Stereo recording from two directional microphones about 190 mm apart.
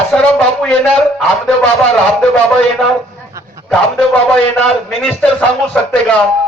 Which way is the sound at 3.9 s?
5° left (ahead or behind).